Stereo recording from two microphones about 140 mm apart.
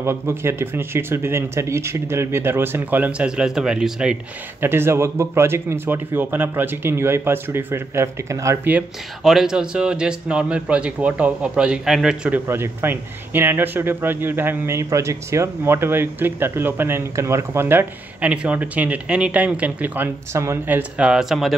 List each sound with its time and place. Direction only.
0.0 s speech: 20° right (ahead or behind)
4.6 s speech: 15° right (ahead or behind)
8.7 s speech: 5° right (ahead or behind)
12.4 s speech: 15° right (ahead or behind); by 21.5 s centre (ahead or behind)